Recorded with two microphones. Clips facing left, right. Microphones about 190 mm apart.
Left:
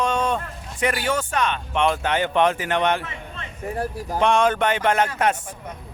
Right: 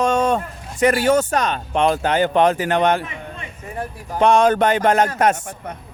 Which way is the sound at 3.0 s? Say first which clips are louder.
Right 4 dB; 15° right (ahead or behind).